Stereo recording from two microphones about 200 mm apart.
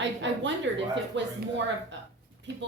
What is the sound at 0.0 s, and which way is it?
A woman's voice, 65° right (ahead or behind).